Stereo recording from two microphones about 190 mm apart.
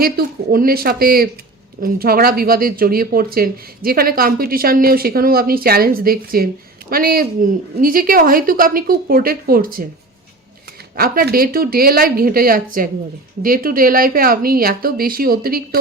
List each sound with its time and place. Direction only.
0.0 s speech: 50° right (ahead or behind)
10.9 s speech: 50° right (ahead or behind)